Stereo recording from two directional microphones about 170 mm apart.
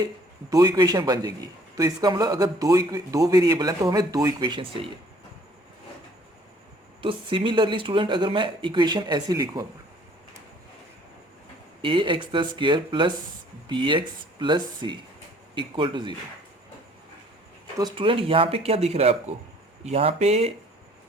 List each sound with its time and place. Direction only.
0.5 s a man's voice: 20° right (ahead or behind)
7.0 s a man's voice: 30° right (ahead or behind)
11.8 s a man's voice: 30° right (ahead or behind)
17.7 s speech: 25° right (ahead or behind)